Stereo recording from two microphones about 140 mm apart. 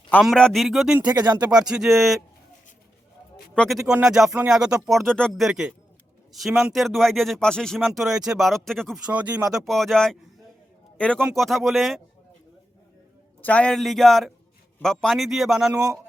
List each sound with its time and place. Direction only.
0.2 s a man's voice: centre (ahead or behind)
1.1 s speech: 30° right (ahead or behind)
1.4 s a man's voice: 5° right (ahead or behind)
3.5 s a man's voice: 5° left (ahead or behind)
9.0 s a man's voice: 10° right (ahead or behind)
13.4 s a man's voice: 10° left (ahead or behind)